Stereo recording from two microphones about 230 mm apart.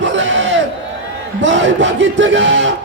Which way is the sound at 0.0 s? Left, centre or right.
Right.